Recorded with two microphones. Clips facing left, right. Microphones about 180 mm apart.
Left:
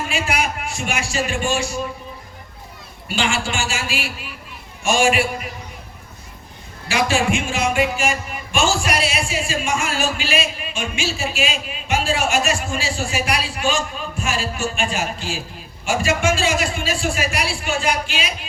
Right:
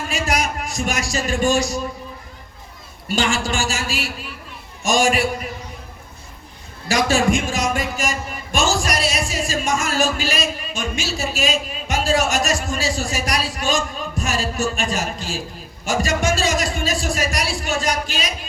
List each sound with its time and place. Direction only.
0.1 s a sound: 40° right (ahead or behind)
3.2 s speech: 40° right (ahead or behind)
6.8 s speech: 40° right (ahead or behind)